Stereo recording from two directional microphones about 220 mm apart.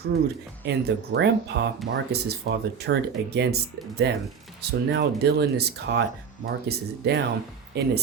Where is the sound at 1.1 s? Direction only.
50° right (ahead or behind).